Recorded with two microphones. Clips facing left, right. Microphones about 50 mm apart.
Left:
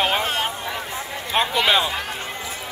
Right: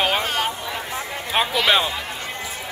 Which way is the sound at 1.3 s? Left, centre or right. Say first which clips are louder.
Even; centre.